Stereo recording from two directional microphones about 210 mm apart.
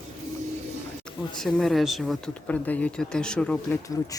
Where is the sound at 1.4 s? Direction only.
Centre (ahead or behind).